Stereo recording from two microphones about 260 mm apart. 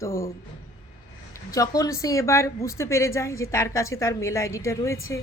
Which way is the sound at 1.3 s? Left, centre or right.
Centre.